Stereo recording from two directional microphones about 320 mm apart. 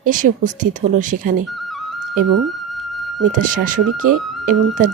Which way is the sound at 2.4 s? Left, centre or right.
Centre.